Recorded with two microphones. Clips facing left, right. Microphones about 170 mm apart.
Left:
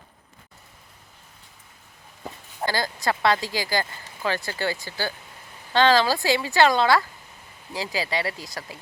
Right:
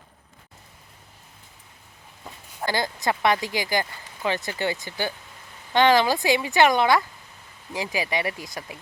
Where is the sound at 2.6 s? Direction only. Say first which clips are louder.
Even; 20° right (ahead or behind).